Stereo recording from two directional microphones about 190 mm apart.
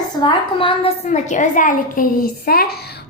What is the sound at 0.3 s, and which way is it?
A woman's voice, 30° left (ahead or behind).